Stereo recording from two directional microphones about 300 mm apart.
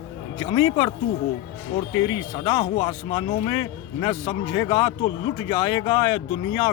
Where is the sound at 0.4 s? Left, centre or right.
Centre.